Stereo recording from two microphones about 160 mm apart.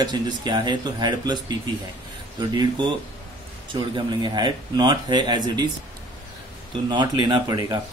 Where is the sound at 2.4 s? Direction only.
30° right (ahead or behind).